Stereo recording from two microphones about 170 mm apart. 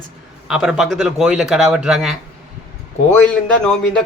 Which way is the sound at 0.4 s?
Centre (ahead or behind).